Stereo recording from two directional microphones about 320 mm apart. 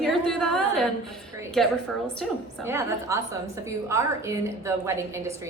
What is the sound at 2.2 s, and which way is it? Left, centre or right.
A woman's voice, centre.